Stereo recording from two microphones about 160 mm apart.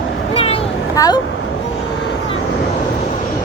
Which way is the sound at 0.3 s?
40° left (ahead or behind).